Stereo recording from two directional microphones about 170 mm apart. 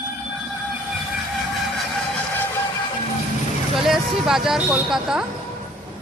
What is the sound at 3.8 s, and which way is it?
Speech, centre (ahead or behind).